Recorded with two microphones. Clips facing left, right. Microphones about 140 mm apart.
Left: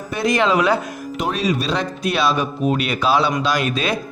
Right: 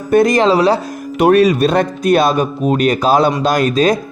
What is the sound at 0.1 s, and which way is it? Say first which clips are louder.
Speech: right 7 dB; 50° right (ahead or behind).